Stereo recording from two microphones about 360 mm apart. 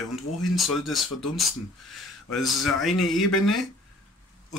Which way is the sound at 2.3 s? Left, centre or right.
Centre.